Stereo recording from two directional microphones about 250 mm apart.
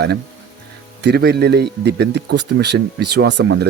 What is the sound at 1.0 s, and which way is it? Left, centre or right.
Speech, right.